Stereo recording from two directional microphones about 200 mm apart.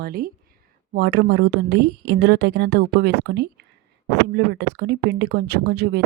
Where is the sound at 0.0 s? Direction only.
50° right (ahead or behind).